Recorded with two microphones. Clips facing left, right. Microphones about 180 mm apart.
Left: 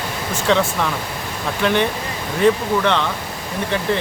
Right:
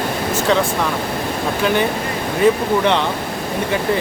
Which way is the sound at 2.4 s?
5° right (ahead or behind).